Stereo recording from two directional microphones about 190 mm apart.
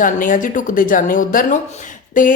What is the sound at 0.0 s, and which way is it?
A woman's voice, 45° left (ahead or behind).